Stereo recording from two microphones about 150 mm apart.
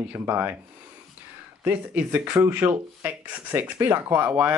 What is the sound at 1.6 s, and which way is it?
Speech, 10° right (ahead or behind).